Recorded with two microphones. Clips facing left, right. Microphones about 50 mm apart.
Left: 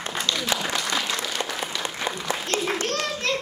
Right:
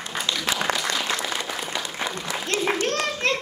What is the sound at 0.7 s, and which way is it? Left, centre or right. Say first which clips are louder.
Applause: right 3 dB; right.